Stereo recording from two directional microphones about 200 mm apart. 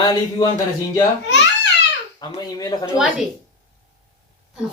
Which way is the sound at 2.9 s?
5° right (ahead or behind).